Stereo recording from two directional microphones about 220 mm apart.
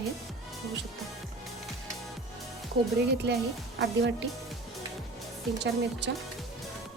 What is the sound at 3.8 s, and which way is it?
Speech, 50° right (ahead or behind).